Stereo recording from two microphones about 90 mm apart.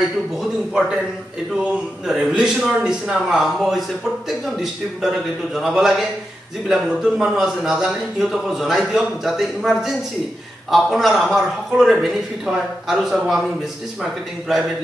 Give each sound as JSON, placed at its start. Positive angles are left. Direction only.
{"t": 0.4, "sound": "a man's voice", "side_deg": -5}